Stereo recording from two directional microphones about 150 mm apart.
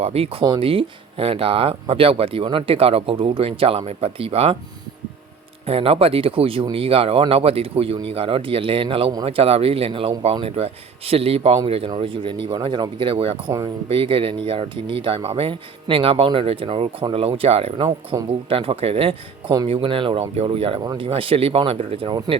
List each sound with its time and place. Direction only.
0.0 s speech: 40° right (ahead or behind)
5.6 s speech: 40° right (ahead or behind)
20.8 s speech: 25° right (ahead or behind)
21.1 s speech: 40° right (ahead or behind)